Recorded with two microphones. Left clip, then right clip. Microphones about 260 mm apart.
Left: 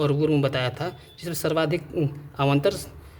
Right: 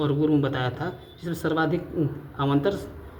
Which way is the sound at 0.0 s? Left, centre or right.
Left.